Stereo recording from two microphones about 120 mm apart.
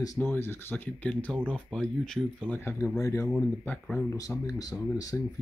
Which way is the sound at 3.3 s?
10° left (ahead or behind).